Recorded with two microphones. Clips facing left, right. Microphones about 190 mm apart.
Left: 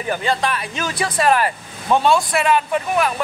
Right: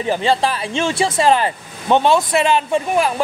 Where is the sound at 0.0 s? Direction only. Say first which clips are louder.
Right 4 dB; 30° right (ahead or behind).